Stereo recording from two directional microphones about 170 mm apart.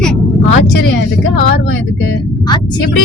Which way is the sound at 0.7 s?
90° left.